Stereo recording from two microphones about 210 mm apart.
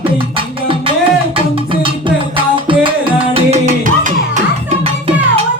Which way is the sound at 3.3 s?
35° right (ahead or behind).